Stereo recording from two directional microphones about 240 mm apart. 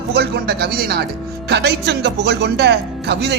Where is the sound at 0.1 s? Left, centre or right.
Right.